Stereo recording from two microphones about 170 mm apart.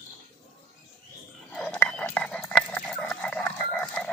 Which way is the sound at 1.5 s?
5° left (ahead or behind).